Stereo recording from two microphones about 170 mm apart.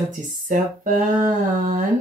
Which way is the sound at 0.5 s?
50° right (ahead or behind).